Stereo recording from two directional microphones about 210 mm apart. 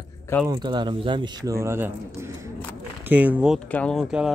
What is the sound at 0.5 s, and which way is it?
Speech, 20° right (ahead or behind).